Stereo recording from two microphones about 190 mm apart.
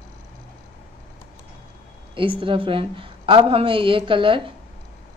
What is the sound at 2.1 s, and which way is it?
A woman's voice, 25° right (ahead or behind).